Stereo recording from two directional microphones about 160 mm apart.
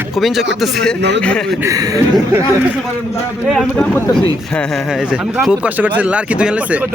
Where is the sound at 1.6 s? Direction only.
20° right (ahead or behind).